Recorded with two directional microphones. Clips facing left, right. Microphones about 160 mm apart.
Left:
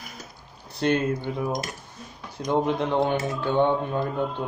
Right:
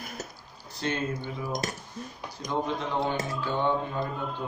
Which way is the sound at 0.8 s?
60° left (ahead or behind).